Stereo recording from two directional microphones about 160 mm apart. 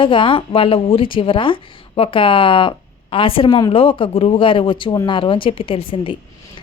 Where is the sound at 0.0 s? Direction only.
30° left (ahead or behind).